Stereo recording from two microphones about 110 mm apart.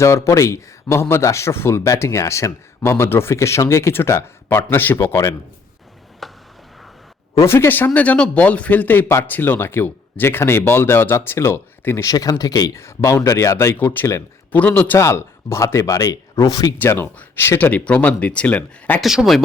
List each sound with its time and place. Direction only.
0.0 s speech: 25° left (ahead or behind)
6.2 s a sound: centre (ahead or behind)
7.3 s speech: 25° left (ahead or behind)
12.1 s speech: 35° left (ahead or behind)
16.7 s speech: 20° left (ahead or behind)
19.0 s speech: centre (ahead or behind)